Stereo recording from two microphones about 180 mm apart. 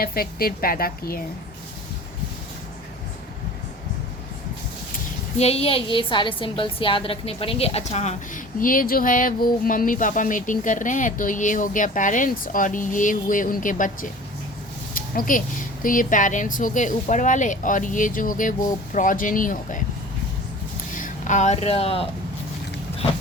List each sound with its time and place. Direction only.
0.0 s a woman's voice: 55° left (ahead or behind)
5.4 s a woman's voice: 35° left (ahead or behind)
20.9 s speech: 45° left (ahead or behind)